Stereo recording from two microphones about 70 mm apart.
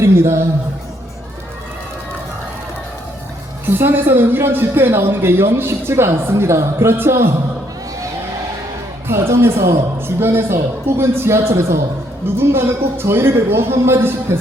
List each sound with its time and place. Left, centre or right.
0.0 s speech: right
3.7 s speech: right
9.0 s speech: right